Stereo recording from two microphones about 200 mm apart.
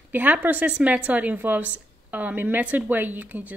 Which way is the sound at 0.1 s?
10° right (ahead or behind).